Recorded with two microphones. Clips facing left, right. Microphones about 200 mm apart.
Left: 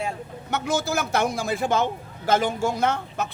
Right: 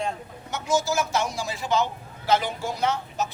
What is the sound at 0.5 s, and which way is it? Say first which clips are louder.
A man's voice: even; 60° left (ahead or behind).